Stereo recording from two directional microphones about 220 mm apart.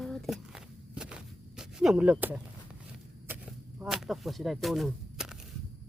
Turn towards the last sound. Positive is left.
turn(degrees=-5)  # may be behind; listen again after turning